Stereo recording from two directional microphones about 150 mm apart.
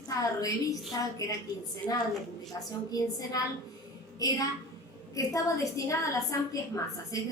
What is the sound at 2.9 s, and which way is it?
A woman's voice, 25° left (ahead or behind).